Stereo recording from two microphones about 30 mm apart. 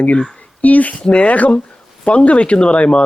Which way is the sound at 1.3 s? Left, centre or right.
Left.